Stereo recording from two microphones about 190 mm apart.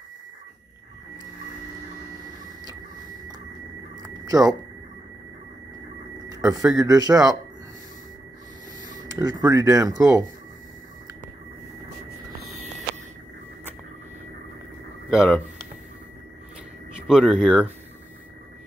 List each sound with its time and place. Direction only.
4.0 s a sound: 20° right (ahead or behind)
6.2 s speech: 20° right (ahead or behind)
8.8 s speech: 20° right (ahead or behind)
15.1 s speech: centre (ahead or behind)
16.9 s speech: centre (ahead or behind)